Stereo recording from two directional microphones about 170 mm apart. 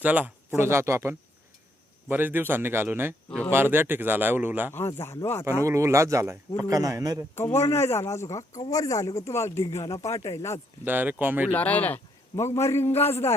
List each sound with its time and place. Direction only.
0.0 s speech: 10° right (ahead or behind)
3.2 s speech: 5° left (ahead or behind)
3.5 s speech: 10° right (ahead or behind)
4.9 s a man's voice: 15° left (ahead or behind)
5.6 s a man's voice: 15° right (ahead or behind)
7.3 s a man's voice: 15° left (ahead or behind)
10.8 s speech: 10° right (ahead or behind)
11.5 s a man's voice: 10° left (ahead or behind)